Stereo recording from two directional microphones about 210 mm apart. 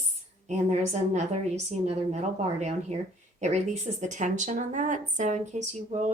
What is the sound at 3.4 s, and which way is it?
Speech, 35° right (ahead or behind).